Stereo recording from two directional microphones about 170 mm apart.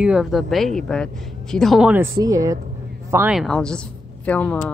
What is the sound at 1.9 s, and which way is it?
Speech, 15° right (ahead or behind).